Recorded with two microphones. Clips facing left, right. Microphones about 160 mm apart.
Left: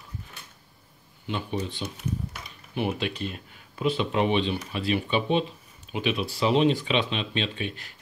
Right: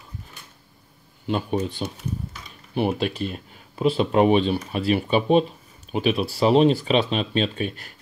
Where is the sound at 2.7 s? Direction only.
40° right (ahead or behind).